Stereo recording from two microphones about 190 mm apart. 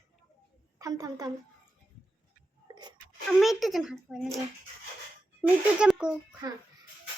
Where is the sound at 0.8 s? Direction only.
20° right (ahead or behind).